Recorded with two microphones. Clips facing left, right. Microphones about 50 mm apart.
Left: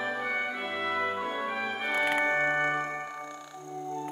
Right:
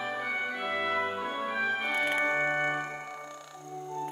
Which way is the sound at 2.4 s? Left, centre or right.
Left.